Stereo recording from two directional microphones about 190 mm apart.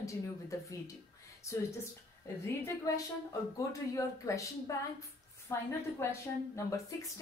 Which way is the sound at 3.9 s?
15° left (ahead or behind).